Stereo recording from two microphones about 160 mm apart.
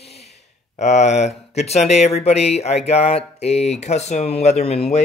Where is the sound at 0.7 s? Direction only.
45° left (ahead or behind).